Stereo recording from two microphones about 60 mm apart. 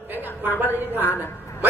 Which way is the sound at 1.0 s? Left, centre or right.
Left.